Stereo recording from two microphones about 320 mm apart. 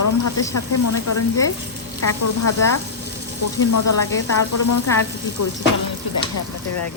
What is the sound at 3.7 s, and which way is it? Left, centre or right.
Speech, left.